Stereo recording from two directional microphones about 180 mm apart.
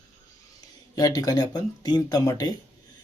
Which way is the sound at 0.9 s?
20° left (ahead or behind).